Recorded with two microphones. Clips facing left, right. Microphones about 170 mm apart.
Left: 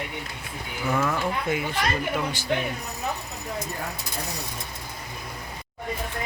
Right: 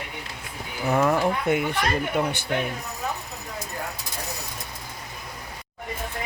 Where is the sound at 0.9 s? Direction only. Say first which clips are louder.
Right 4 dB; 40° right (ahead or behind).